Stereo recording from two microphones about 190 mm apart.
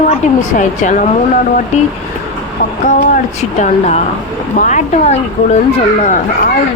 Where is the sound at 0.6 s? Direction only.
40° left (ahead or behind).